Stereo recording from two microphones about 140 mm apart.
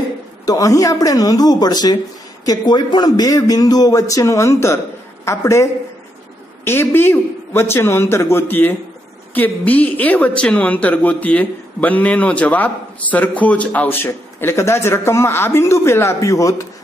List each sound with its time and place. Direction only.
0.5 s a man's voice: 25° left (ahead or behind)